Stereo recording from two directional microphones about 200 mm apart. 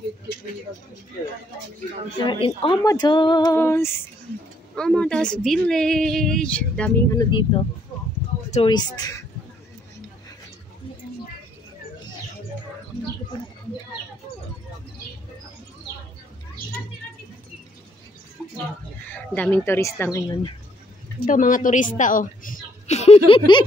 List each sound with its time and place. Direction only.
2.2 s a woman's voice: 25° left (ahead or behind); by 7.1 s 5° left (ahead or behind)
7.2 s speech: 25° left (ahead or behind)
8.6 s speech: 20° left (ahead or behind)
19.0 s speech: 10° left (ahead or behind)
21.2 s a woman's voice: 40° left (ahead or behind); by 23.6 s 25° left (ahead or behind)